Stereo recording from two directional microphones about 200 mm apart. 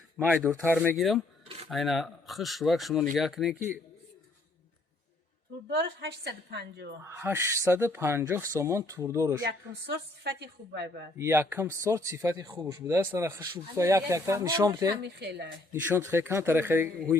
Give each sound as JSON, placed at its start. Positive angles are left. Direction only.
{"t": 0.4, "sound": "a man's voice", "side_deg": -10}
{"t": 5.7, "sound": "a woman's voice", "side_deg": -55}
{"t": 7.0, "sound": "a man's voice", "side_deg": -10}
{"t": 9.5, "sound": "a woman's voice", "side_deg": -55}
{"t": 11.2, "sound": "a man's voice", "side_deg": -10}
{"t": 15.0, "sound": "a woman's voice", "side_deg": -55}
{"t": 15.7, "sound": "a man's voice", "side_deg": -10}